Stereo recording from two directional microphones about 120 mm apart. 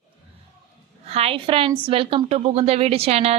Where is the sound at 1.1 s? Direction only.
55° right (ahead or behind).